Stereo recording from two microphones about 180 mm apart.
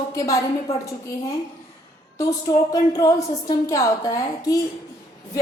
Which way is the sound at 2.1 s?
20° left (ahead or behind).